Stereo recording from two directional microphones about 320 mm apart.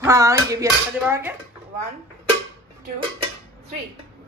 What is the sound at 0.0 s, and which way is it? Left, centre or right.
Speech, centre.